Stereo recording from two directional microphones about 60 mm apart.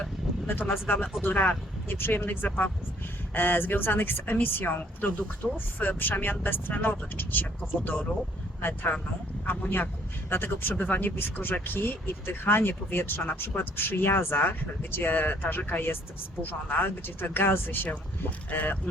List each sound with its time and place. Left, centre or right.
0.4 s speech: left